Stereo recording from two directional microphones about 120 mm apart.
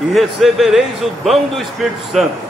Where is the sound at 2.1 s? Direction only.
Centre (ahead or behind).